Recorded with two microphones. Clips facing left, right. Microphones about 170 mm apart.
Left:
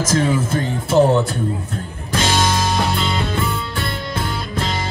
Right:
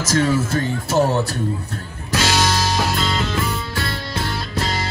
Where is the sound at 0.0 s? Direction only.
55° left (ahead or behind).